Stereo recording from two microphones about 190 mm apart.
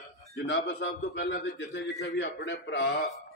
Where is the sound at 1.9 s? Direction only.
65° left (ahead or behind).